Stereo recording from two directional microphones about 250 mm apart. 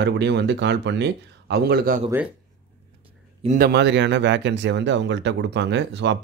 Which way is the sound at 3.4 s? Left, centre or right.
Right.